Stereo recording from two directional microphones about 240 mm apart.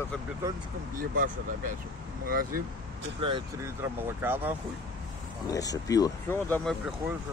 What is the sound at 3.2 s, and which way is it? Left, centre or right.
Speech, centre.